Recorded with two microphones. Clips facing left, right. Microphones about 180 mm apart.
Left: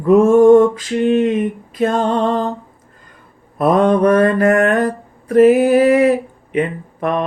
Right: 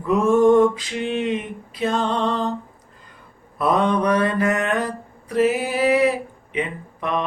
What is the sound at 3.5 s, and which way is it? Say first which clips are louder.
Mantra: left 6 dB; 50° left (ahead or behind).